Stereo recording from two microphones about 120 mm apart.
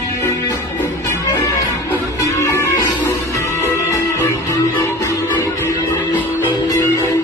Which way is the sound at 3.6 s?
25° left (ahead or behind).